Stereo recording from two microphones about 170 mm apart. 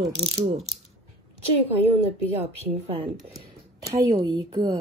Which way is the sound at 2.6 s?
35° right (ahead or behind).